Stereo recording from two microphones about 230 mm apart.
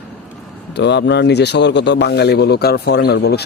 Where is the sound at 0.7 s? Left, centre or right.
Left.